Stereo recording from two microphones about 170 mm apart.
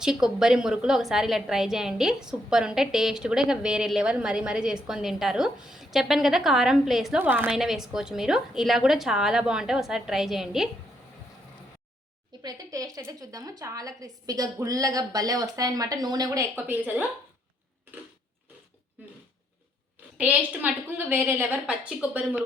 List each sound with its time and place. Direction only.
0.0 s a woman's voice: 5° right (ahead or behind)
12.4 s a woman's voice: 20° right (ahead or behind)
20.1 s a woman's voice: 5° right (ahead or behind)